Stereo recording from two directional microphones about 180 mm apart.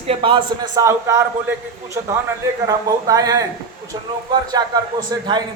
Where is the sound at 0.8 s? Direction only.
15° right (ahead or behind).